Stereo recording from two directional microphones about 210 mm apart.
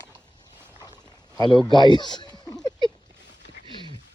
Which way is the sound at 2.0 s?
20° left (ahead or behind).